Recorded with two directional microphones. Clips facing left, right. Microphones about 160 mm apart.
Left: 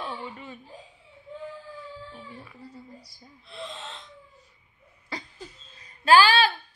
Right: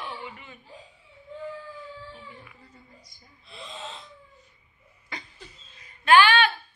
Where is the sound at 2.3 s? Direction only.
30° left (ahead or behind).